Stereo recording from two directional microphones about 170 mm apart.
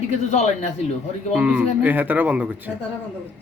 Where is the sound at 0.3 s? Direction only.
45° left (ahead or behind).